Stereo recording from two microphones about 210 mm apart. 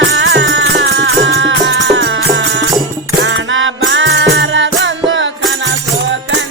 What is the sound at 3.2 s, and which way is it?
Music, 65° right (ahead or behind).